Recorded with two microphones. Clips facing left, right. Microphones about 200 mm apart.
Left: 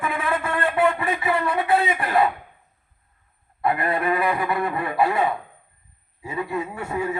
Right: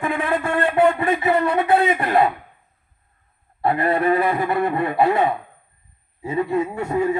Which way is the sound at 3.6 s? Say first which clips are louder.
Right 4 dB; 25° right (ahead or behind).